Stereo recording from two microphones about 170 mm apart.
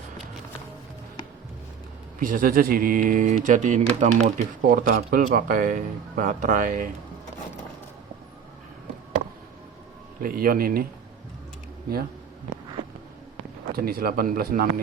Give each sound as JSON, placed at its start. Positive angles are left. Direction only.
{"t": 2.1, "sound": "speech", "side_deg": -55}
{"t": 4.7, "sound": "speech", "side_deg": -55}
{"t": 10.2, "sound": "speech", "side_deg": -55}
{"t": 13.7, "sound": "speech", "side_deg": -60}